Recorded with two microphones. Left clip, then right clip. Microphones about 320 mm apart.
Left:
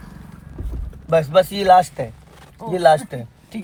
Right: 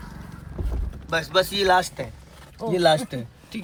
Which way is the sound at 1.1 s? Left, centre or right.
Left.